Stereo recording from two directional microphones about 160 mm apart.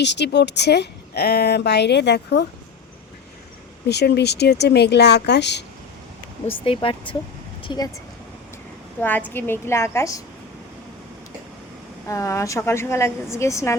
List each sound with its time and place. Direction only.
0.0 s a woman's voice: 90° left
3.8 s a woman's voice: 90° left
6.7 s speech: 35° left (ahead or behind)
9.0 s a woman's voice: 10° left (ahead or behind)
12.0 s a woman's voice: 20° left (ahead or behind)